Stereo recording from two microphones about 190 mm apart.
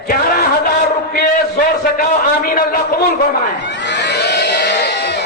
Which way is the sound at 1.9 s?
50° left (ahead or behind).